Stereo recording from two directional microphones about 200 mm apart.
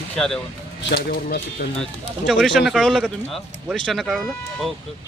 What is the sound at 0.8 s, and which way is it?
Speech, 50° left (ahead or behind).